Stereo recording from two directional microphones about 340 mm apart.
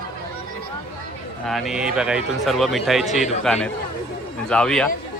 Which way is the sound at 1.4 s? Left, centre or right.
Centre.